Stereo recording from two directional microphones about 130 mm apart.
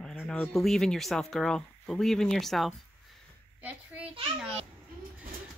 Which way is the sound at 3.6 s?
10° right (ahead or behind).